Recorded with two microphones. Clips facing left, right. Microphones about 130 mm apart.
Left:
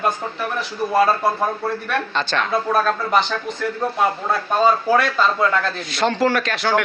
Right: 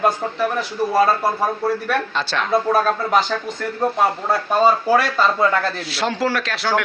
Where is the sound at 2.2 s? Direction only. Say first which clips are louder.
Even; centre (ahead or behind).